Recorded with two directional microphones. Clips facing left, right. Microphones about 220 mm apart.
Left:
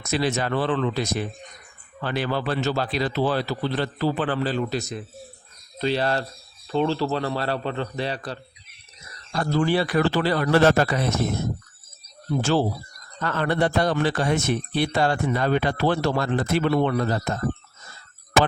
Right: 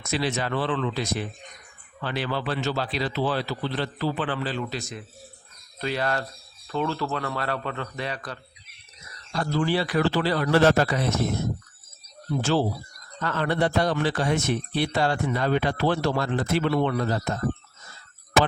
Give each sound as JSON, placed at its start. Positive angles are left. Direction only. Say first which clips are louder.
{"t": 0.0, "sound": "a man's voice", "louder": "left 3 dB", "side_deg": 45}
{"t": 9.3, "sound": "a man's voice", "louder": "left 3 dB", "side_deg": 50}
{"t": 12.4, "sound": "a man's voice", "louder": "left 2 dB", "side_deg": 45}